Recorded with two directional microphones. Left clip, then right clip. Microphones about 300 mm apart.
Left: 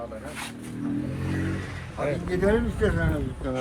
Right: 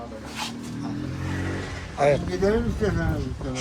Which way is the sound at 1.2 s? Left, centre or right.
Right.